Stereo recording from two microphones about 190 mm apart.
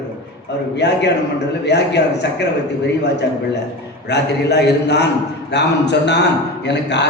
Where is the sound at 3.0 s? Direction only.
65° left (ahead or behind).